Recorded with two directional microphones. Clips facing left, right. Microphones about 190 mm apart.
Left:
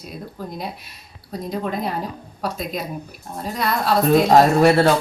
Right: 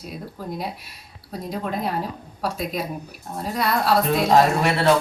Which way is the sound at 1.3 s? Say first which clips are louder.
Left 2 dB; 5° right (ahead or behind).